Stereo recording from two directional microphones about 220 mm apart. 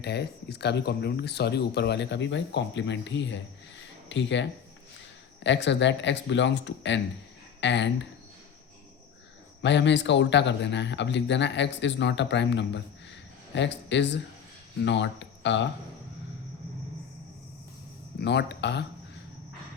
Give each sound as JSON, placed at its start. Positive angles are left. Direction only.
{"t": 0.0, "sound": "speech", "side_deg": 50}
{"t": 9.6, "sound": "speech", "side_deg": 55}
{"t": 18.2, "sound": "speech", "side_deg": 50}